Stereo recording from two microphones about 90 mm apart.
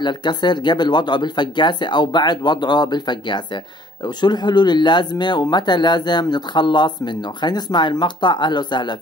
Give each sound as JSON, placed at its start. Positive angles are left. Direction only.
{"t": 0.0, "sound": "speech", "side_deg": 55}